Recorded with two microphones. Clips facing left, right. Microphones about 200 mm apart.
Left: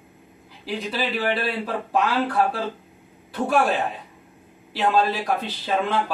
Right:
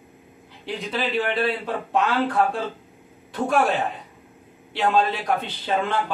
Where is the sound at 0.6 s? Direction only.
5° left (ahead or behind).